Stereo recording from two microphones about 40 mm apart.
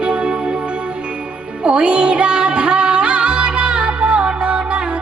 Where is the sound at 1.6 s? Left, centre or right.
Right.